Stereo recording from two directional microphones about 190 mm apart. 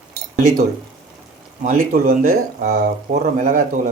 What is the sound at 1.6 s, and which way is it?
Speech, 50° right (ahead or behind).